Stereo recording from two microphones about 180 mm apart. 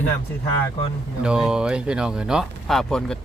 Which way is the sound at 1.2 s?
5° right (ahead or behind).